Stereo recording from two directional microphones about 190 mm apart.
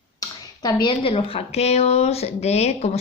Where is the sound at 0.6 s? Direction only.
20° left (ahead or behind).